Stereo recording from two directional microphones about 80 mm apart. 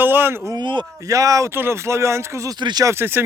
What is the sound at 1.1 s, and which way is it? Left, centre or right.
Speech, right.